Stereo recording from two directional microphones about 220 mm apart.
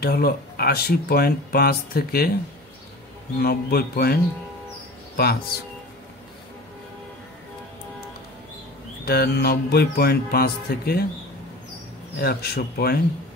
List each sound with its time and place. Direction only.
0.0 s speech: 45° left (ahead or behind)
3.3 s speech: 45° left (ahead or behind)
9.0 s speech: 45° left (ahead or behind)
12.2 s speech: 45° left (ahead or behind)